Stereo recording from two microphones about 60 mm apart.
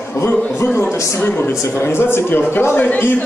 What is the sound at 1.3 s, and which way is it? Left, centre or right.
A man's voice, left.